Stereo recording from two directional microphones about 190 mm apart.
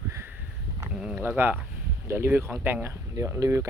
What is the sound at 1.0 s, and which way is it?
Speech, 10° right (ahead or behind).